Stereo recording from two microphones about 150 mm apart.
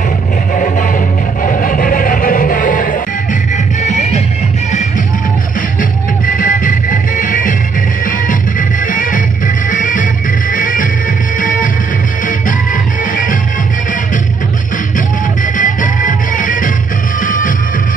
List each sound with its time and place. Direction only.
0.6 s music: 65° left (ahead or behind)
3.5 s music: 50° left (ahead or behind)
5.8 s music: 65° left (ahead or behind)
15.0 s music: 60° left (ahead or behind)